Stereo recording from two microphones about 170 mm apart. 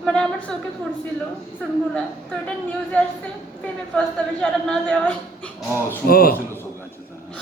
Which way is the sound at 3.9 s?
5° left (ahead or behind).